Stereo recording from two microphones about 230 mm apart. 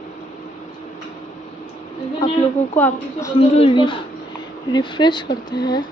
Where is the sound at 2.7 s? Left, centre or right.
Centre.